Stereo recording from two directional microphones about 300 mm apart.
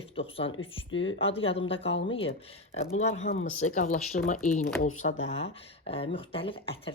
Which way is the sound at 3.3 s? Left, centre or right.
Left.